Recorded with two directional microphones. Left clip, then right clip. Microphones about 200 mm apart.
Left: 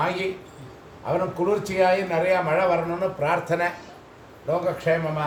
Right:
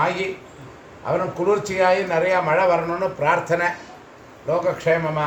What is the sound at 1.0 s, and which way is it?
A man's voice, 10° right (ahead or behind).